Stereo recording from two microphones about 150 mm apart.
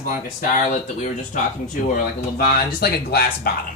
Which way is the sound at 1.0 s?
60° left (ahead or behind).